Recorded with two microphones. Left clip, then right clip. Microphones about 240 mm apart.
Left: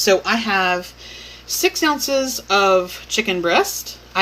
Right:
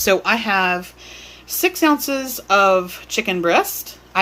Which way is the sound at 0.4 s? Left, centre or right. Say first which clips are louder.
Even; right.